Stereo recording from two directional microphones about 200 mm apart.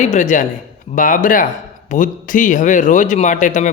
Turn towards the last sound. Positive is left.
turn(degrees=40)  # may be behind; listen again after turning